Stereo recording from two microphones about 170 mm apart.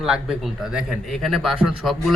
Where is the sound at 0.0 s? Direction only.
5° right (ahead or behind).